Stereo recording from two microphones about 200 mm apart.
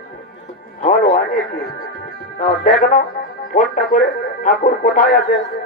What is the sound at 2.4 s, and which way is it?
Speech, 35° left (ahead or behind).